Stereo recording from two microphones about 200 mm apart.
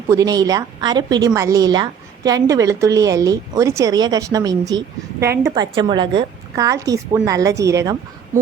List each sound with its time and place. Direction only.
0.1 s a woman's voice: 15° right (ahead or behind)